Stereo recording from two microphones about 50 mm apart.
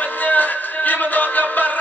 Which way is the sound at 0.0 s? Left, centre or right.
Left.